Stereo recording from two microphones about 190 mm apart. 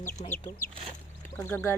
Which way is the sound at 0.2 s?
30° left (ahead or behind).